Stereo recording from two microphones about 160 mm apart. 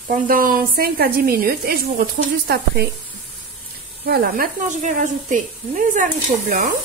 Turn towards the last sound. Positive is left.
turn(degrees=-50)  # may be behind; listen again after turning